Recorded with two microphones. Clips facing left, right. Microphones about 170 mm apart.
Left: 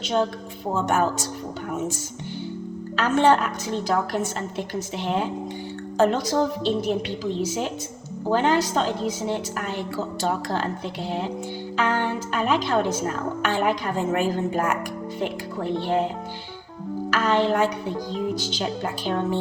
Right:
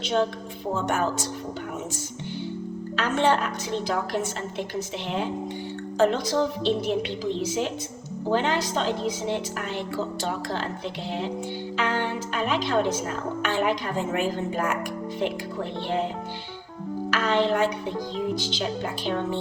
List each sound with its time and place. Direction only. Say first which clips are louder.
2.9 s speech: left 4 dB; 45° left (ahead or behind)
6.0 s speech: left 2 dB; 45° left (ahead or behind)
11.8 s speech: left 3 dB; 45° left (ahead or behind)
17.1 s music: left 2 dB; 45° left (ahead or behind)